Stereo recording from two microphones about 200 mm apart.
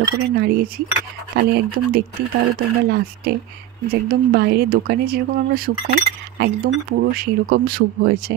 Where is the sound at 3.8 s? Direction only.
50° right (ahead or behind).